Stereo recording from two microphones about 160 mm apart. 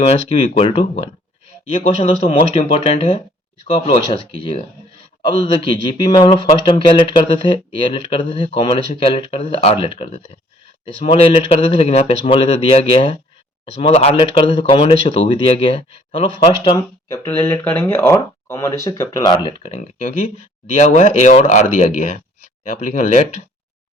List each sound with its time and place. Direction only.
0.0 s speech: 40° left (ahead or behind)
17.1 s speech: 15° left (ahead or behind); by 19.8 s 35° left (ahead or behind)
19.8 s speech: 45° left (ahead or behind)